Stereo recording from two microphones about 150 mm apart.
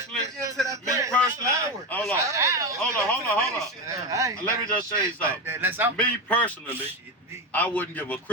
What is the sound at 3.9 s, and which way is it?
Speech, 20° right (ahead or behind).